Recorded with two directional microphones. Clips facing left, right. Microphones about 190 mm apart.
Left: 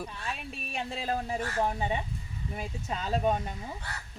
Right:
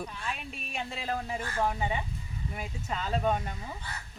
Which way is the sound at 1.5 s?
20° left (ahead or behind).